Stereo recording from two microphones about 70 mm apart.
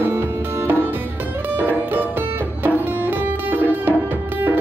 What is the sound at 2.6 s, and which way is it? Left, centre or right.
Music, right.